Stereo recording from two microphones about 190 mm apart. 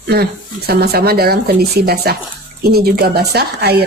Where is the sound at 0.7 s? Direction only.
55° right (ahead or behind).